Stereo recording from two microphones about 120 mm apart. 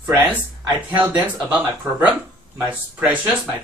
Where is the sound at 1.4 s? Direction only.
10° right (ahead or behind).